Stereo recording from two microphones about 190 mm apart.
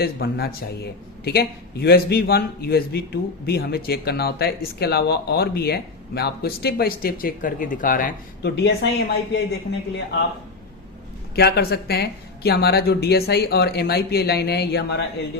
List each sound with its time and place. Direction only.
0.0 s a man's voice: 55° left (ahead or behind)
11.3 s a man's voice: 60° left (ahead or behind)